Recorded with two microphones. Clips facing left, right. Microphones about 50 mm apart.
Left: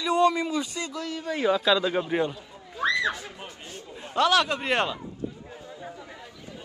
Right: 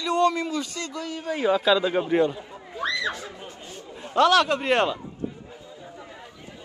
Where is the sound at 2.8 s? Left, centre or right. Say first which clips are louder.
Left 2 dB; left.